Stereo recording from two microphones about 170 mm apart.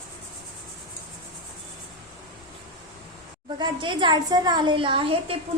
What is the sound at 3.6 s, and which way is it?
A woman's voice, 30° right (ahead or behind).